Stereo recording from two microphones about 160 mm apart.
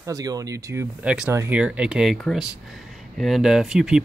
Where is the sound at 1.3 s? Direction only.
15° right (ahead or behind).